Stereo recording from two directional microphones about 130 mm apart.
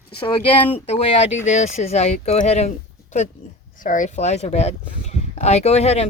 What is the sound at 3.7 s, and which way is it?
Speech, 85° left.